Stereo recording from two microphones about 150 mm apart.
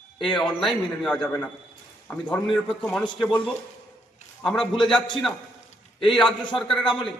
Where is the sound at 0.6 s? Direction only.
Centre (ahead or behind).